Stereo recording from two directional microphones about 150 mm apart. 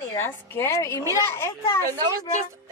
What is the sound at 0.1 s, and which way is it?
A woman's voice, 15° left (ahead or behind).